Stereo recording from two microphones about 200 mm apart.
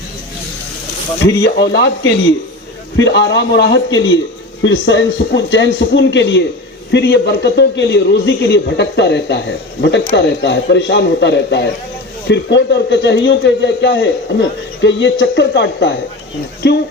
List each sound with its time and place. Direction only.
1.5 s a man's voice: 60° left (ahead or behind)